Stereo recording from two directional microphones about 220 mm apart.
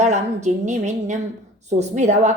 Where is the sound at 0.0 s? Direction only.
30° right (ahead or behind).